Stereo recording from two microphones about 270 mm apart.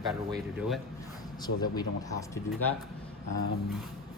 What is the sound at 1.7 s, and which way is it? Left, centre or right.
Speech, centre.